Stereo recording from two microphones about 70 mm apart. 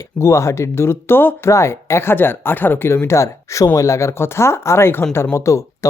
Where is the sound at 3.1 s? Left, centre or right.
Left.